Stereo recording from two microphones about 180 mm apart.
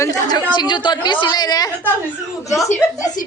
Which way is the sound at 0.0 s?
20° left (ahead or behind).